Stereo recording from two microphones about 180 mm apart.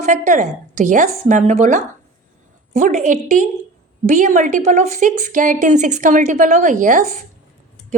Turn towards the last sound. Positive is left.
turn(degrees=-45)  # may be behind; listen again after turning